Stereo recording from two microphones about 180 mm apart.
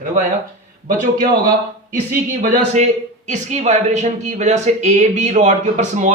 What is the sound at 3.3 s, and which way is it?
Speech, 40° right (ahead or behind).